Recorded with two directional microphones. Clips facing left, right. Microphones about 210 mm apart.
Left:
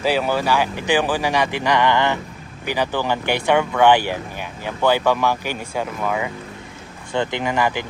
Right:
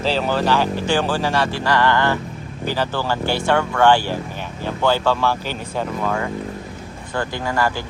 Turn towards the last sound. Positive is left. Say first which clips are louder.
# left 1 dB
turn(degrees=20)  # may be behind; listen again after turning